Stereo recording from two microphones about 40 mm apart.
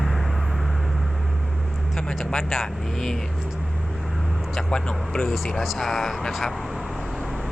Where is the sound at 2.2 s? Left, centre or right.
Centre.